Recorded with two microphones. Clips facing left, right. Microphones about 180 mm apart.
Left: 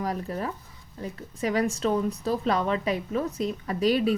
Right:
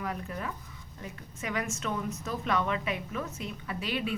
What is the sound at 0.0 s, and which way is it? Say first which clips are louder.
A woman's voice: left 6 dB; 35° left (ahead or behind).